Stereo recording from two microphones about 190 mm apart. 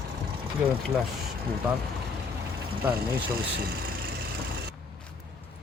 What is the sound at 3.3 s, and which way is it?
Vehicle, 50° right (ahead or behind).